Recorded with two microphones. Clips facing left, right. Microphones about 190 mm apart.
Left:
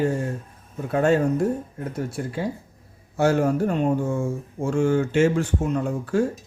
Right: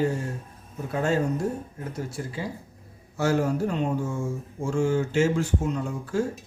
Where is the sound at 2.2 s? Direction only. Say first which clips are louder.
Left 5 dB; 55° left (ahead or behind).